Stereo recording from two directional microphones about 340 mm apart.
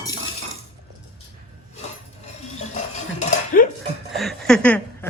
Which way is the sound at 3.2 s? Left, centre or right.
Left.